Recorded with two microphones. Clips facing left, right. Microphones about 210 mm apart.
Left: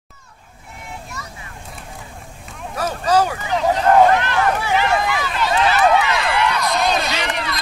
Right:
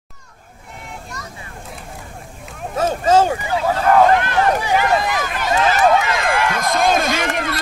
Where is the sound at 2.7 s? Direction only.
25° right (ahead or behind).